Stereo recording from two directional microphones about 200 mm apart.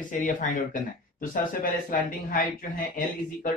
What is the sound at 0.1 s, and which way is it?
Speech, 40° left (ahead or behind).